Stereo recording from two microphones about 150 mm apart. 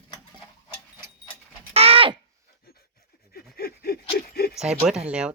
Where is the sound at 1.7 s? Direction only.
40° right (ahead or behind).